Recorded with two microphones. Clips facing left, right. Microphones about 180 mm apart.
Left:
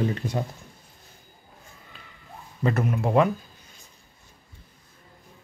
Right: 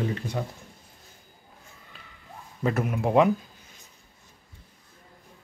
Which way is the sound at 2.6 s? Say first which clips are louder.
Left 1 dB; 10° right (ahead or behind).